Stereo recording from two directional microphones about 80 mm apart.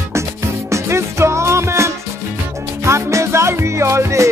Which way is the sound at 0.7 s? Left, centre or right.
Right.